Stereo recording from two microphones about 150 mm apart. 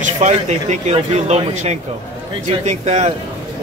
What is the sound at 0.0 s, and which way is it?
Speech, 50° right (ahead or behind).